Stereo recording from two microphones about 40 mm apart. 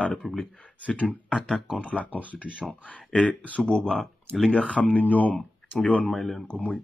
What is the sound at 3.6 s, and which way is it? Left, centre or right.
Speech, left.